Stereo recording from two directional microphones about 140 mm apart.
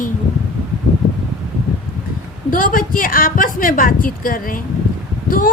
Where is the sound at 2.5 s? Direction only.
85° left.